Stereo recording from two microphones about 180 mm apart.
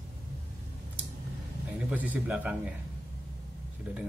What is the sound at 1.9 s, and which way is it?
Speech, 10° right (ahead or behind).